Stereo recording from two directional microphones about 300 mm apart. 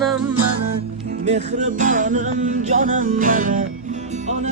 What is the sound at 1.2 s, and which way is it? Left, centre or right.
Music, right.